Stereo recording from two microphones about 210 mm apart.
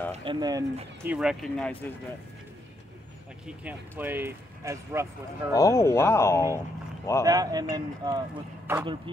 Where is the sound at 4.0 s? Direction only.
10° right (ahead or behind).